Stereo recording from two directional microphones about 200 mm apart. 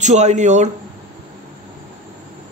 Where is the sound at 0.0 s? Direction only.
35° right (ahead or behind).